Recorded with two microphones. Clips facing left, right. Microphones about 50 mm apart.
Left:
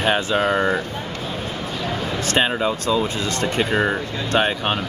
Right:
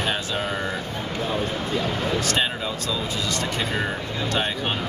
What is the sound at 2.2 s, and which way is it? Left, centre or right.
Speech, left.